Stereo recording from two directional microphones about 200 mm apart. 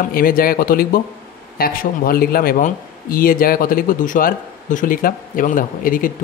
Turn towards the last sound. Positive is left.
turn(degrees=45)  # may be behind; listen again after turning